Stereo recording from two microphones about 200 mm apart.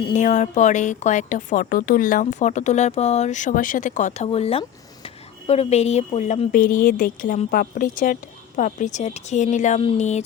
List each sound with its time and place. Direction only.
0.0 s speech: 35° left (ahead or behind)